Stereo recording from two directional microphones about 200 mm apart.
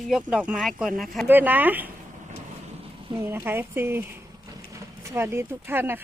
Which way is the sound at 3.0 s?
15° right (ahead or behind).